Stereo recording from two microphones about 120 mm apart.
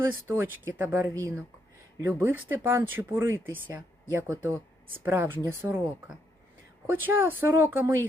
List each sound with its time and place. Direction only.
0.0 s speech: 20° right (ahead or behind)
6.9 s speech: 20° right (ahead or behind)